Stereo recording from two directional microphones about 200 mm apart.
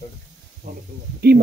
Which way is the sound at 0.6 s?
35° right (ahead or behind).